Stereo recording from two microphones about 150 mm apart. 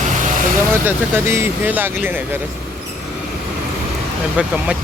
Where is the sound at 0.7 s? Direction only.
15° right (ahead or behind).